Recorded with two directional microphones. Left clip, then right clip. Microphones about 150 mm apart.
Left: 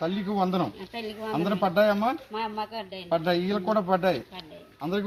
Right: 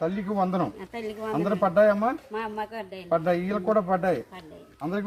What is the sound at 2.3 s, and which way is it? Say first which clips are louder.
Speech: even; 15° left (ahead or behind).